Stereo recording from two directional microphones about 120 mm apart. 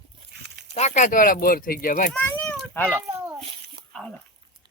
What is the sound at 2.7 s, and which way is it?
Speech, 10° left (ahead or behind).